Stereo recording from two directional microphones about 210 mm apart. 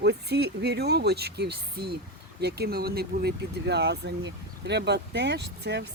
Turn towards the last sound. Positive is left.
turn(degrees=-50)  # may be behind; listen again after turning